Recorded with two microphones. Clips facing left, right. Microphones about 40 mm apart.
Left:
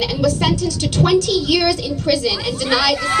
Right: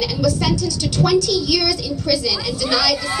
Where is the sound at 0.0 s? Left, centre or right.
Left.